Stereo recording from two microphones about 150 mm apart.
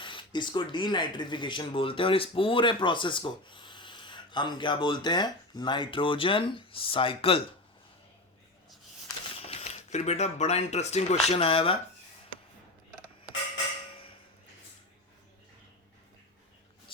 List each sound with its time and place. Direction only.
0.0 s speech: 35° left (ahead or behind)
9.4 s speech: 45° left (ahead or behind)